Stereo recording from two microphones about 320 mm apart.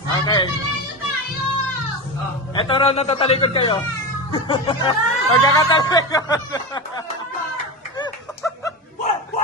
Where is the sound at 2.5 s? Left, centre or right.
Centre.